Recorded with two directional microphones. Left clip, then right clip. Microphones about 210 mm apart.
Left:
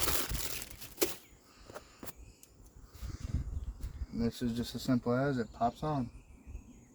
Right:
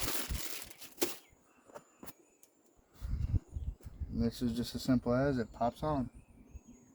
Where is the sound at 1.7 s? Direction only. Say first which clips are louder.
Left 3 dB; 35° left (ahead or behind).